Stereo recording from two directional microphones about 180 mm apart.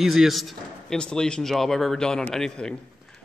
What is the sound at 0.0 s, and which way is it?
A man's voice, centre (ahead or behind).